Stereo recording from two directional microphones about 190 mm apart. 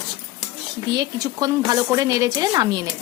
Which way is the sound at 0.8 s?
20° right (ahead or behind).